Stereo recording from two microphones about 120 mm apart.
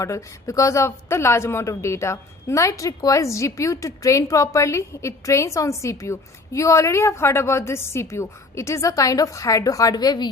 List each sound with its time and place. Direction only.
0.0 s speech: 25° left (ahead or behind)